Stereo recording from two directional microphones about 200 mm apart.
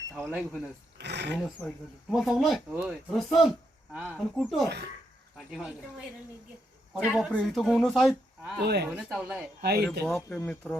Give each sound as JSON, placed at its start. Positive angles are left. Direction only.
{"t": 0.3, "sound": "speech", "side_deg": 0}
{"t": 0.9, "sound": "speech", "side_deg": -55}
{"t": 1.4, "sound": "speech", "side_deg": 0}
{"t": 8.6, "sound": "speech", "side_deg": -55}
{"t": 9.1, "sound": "speech", "side_deg": -5}
{"t": 9.6, "sound": "speech", "side_deg": -55}
{"t": 10.1, "sound": "speech", "side_deg": 5}